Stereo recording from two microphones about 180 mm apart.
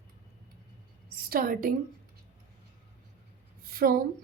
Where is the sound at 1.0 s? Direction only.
55° right (ahead or behind).